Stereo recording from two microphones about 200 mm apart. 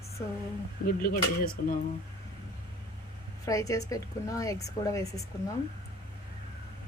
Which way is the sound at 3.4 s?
15° left (ahead or behind).